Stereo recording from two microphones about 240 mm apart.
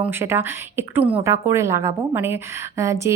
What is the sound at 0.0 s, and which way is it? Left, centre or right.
A woman's voice, centre.